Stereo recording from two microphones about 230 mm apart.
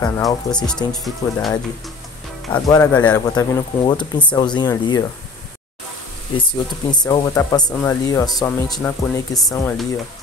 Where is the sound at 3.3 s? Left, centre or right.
Centre.